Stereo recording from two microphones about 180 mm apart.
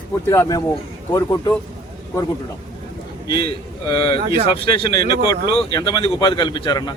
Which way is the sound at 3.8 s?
25° left (ahead or behind).